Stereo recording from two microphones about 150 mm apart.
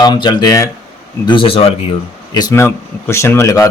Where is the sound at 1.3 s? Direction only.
35° left (ahead or behind).